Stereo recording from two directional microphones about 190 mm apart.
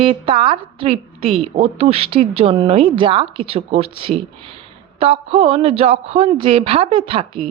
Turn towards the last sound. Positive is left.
turn(degrees=-25)  # may be behind; listen again after turning